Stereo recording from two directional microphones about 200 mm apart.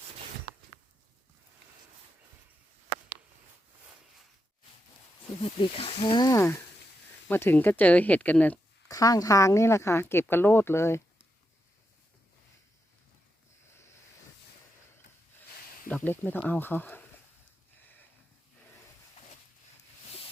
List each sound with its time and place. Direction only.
5.4 s speech: 30° left (ahead or behind); by 9.0 s 5° left (ahead or behind)
9.0 s speech: 20° left (ahead or behind)
15.9 s speech: 10° left (ahead or behind)
17.7 s a sound: 10° left (ahead or behind)